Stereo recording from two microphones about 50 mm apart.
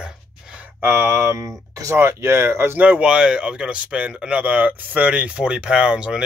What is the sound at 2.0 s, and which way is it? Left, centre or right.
Speech, right.